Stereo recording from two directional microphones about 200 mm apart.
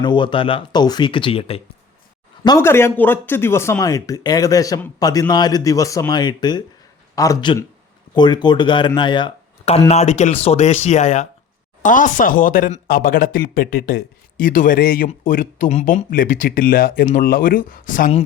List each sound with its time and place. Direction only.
0.0 s speech: 25° left (ahead or behind)
2.4 s speech: 15° left (ahead or behind); by 18.2 s 40° left (ahead or behind)